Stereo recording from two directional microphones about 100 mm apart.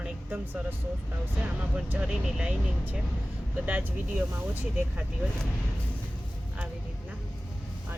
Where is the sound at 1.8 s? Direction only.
10° right (ahead or behind).